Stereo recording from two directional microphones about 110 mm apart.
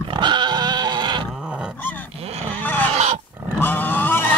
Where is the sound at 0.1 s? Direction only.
45° right (ahead or behind).